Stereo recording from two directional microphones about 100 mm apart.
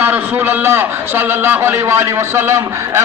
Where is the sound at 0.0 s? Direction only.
20° right (ahead or behind).